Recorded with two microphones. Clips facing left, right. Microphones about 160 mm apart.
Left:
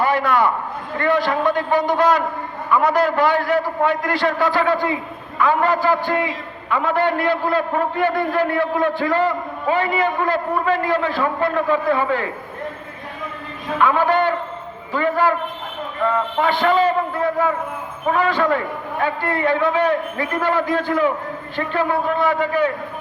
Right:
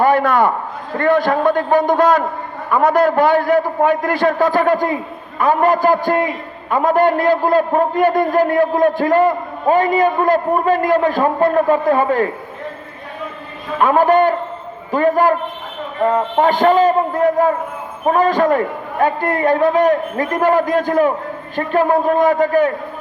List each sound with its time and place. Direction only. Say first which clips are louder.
0.0 s a man's voice: right 4 dB; 50° right (ahead or behind)
13.7 s a man's voice: right 5 dB; 45° right (ahead or behind)